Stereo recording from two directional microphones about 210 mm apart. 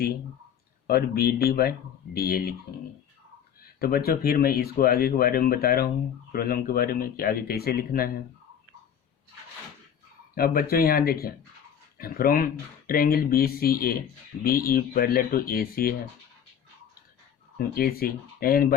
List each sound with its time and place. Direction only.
0.9 s speech: 45° left (ahead or behind)
3.6 s speech: 45° left (ahead or behind)
10.3 s speech: 45° left (ahead or behind)
17.7 s speech: 45° left (ahead or behind)